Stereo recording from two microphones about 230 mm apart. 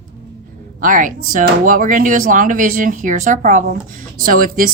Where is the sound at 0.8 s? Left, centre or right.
Right.